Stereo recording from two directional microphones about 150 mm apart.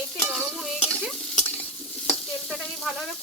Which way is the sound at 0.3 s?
Centre (ahead or behind).